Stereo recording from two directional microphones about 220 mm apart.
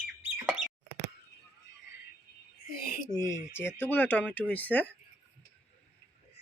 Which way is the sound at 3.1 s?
15° left (ahead or behind).